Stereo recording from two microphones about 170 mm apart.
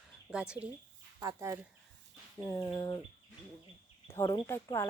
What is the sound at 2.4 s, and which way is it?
Speech, 15° left (ahead or behind).